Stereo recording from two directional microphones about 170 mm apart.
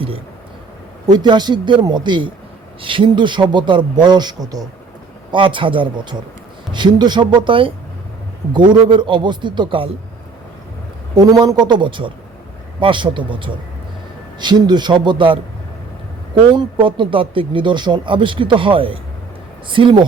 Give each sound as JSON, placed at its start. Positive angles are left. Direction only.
{"t": 1.0, "sound": "speech", "side_deg": -25}
{"t": 11.1, "sound": "speech", "side_deg": -25}
{"t": 16.6, "sound": "speech", "side_deg": -30}